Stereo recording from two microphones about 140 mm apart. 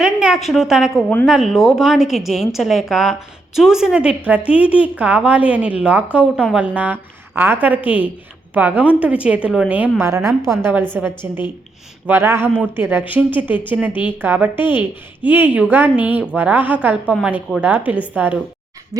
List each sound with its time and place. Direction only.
0.0 s a woman's voice: 5° right (ahead or behind)